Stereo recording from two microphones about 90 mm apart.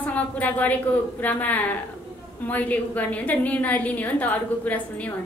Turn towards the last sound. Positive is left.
turn(degrees=20)  # may be behind; listen again after turning